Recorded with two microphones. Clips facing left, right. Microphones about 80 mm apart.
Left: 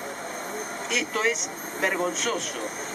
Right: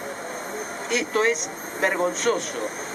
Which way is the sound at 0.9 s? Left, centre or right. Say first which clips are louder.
Right 4 dB; centre.